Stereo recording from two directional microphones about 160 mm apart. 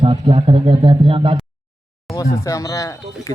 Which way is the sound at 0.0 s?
30° right (ahead or behind).